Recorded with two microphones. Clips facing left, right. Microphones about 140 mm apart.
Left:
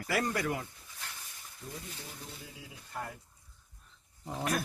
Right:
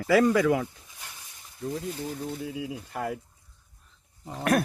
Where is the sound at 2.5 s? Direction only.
85° right.